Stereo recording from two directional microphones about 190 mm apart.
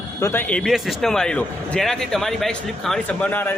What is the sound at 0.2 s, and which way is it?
Speech, 10° left (ahead or behind).